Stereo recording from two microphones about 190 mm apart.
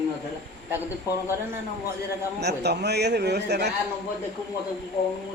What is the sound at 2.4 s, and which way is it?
A man's voice, 60° right (ahead or behind).